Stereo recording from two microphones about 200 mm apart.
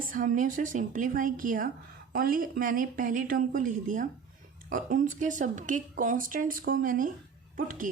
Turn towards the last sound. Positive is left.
turn(degrees=-40)  # may be behind; listen again after turning